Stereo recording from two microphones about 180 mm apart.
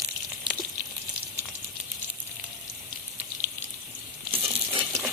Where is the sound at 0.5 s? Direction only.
25° right (ahead or behind).